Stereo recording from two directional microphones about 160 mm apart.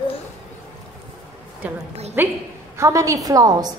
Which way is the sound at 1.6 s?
10° right (ahead or behind).